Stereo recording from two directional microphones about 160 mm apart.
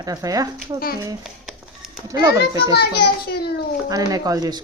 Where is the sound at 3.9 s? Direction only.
25° right (ahead or behind).